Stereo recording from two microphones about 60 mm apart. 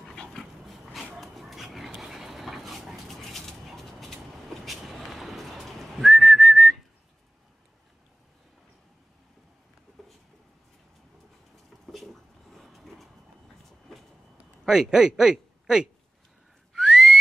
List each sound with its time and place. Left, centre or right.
0.1 s dog: centre
0.9 s dog: centre
4.6 s whistling: centre
10.0 s a sound: centre
11.9 s a sound: centre
14.6 s a man's voice: centre
16.8 s whistling: centre